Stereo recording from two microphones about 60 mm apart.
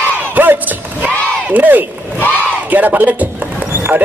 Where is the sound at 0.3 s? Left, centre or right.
Right.